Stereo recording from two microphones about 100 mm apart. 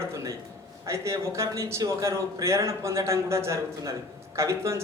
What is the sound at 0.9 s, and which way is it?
A man's voice, 30° right (ahead or behind).